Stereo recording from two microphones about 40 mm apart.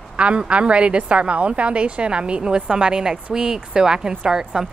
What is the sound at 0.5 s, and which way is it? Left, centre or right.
A woman's voice, right.